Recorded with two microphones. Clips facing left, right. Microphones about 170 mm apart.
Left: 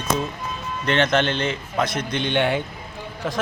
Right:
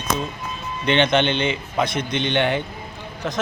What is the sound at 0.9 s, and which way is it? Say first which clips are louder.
A man's voice: right 2 dB; 5° left (ahead or behind).